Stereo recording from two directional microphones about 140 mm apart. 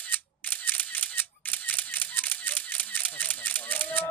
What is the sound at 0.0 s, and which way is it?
Single-lens reflex camera, 10° left (ahead or behind).